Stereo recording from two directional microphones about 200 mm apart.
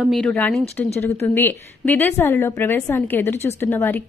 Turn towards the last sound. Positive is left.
turn(degrees=10)  # may be behind; listen again after turning